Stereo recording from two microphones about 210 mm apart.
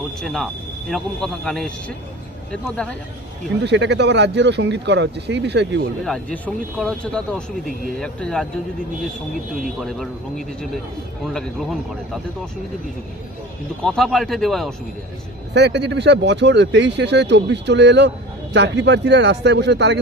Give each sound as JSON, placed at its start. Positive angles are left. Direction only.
{"t": 0.2, "sound": "speech", "side_deg": 0}
{"t": 3.6, "sound": "speech", "side_deg": -55}
{"t": 6.3, "sound": "speech", "side_deg": 5}
{"t": 9.8, "sound": "speech", "side_deg": 0}
{"t": 13.8, "sound": "speech", "side_deg": 0}
{"t": 15.5, "sound": "speech", "side_deg": -55}